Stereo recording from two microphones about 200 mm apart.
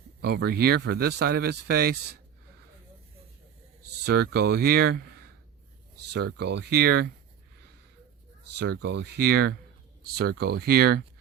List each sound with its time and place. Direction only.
0.2 s speech: 55° right (ahead or behind)
4.0 s speech: 55° right (ahead or behind)
8.5 s speech: 55° right (ahead or behind)